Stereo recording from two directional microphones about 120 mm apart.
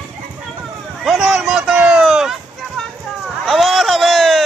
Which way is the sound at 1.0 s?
Centre (ahead or behind).